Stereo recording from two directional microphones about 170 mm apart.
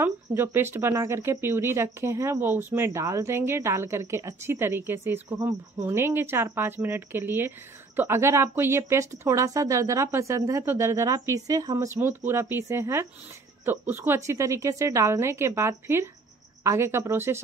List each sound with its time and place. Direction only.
0.0 s speech: 15° right (ahead or behind)